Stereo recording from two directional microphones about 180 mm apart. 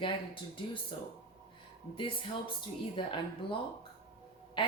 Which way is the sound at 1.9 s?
30° left (ahead or behind).